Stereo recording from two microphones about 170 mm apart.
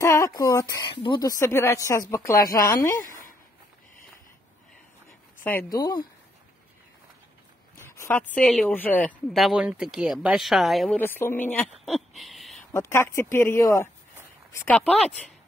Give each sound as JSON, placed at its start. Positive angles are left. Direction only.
{"t": 0.0, "sound": "a woman's voice", "side_deg": 20}
{"t": 1.4, "sound": "a woman's voice", "side_deg": 15}
{"t": 3.0, "sound": "a sound", "side_deg": 55}
{"t": 5.4, "sound": "speech", "side_deg": 10}
{"t": 5.7, "sound": "a woman's voice", "side_deg": 25}
{"t": 7.8, "sound": "speech", "side_deg": 15}
{"t": 11.0, "sound": "speech", "side_deg": 10}
{"t": 12.2, "sound": "a sound", "side_deg": 0}
{"t": 12.7, "sound": "speech", "side_deg": 15}